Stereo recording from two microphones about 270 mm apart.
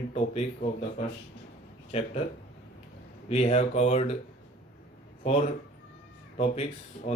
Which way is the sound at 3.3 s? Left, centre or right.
Left.